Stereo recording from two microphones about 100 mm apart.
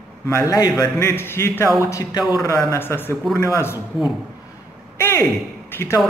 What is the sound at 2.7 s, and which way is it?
Speech, 25° left (ahead or behind).